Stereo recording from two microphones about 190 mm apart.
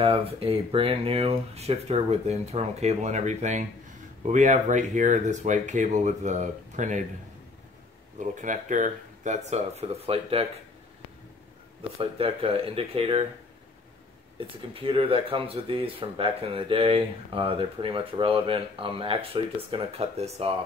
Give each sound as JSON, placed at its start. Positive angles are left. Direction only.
{"t": 0.0, "sound": "speech", "side_deg": -30}
{"t": 8.2, "sound": "speech", "side_deg": -40}
{"t": 12.0, "sound": "speech", "side_deg": -30}
{"t": 14.7, "sound": "speech", "side_deg": -30}